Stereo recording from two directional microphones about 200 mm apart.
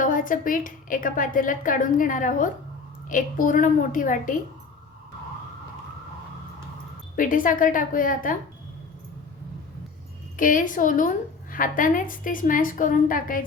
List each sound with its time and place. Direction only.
0.0 s a woman's voice: 40° left (ahead or behind)
7.2 s a woman's voice: 40° left (ahead or behind)
10.3 s a woman's voice: 40° left (ahead or behind)